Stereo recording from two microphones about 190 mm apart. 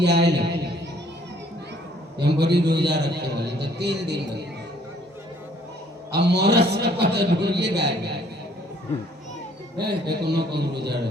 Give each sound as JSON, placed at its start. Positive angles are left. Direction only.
{"t": 0.0, "sound": "a man's voice", "side_deg": -60}
{"t": 2.1, "sound": "a man's voice", "side_deg": -60}
{"t": 6.1, "sound": "a man's voice", "side_deg": -60}
{"t": 9.8, "sound": "a man's voice", "side_deg": -60}